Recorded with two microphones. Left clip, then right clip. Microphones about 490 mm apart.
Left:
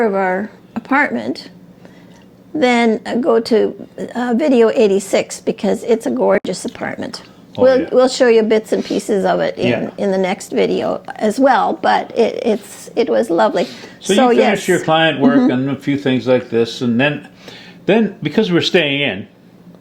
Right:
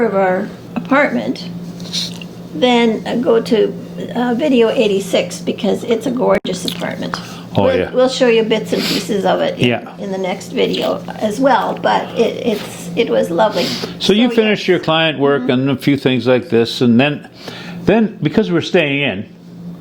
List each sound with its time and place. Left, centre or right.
0.0 s a woman's voice: left
2.6 s a woman's voice: left
14.1 s speech: right
17.8 s speech: centre